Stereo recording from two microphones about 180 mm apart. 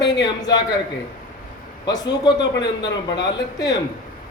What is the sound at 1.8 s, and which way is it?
A woman's voice, 20° left (ahead or behind).